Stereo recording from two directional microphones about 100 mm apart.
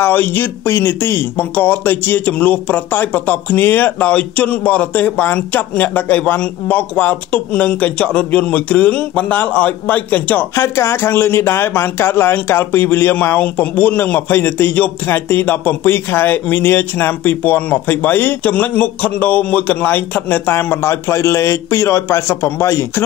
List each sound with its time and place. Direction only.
0.0 s speech: 20° left (ahead or behind)
10.6 s speech: 25° left (ahead or behind)